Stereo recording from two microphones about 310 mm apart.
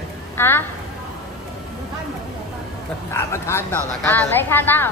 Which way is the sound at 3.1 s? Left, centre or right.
Centre.